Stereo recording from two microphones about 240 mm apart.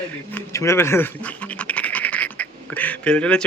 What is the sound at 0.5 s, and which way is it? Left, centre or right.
Speech, centre.